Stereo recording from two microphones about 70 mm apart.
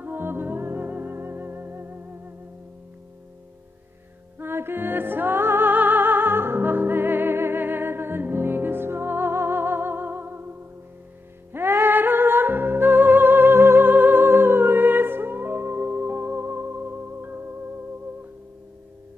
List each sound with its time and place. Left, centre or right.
0.0 s music: right
4.4 s music: right
11.5 s music: right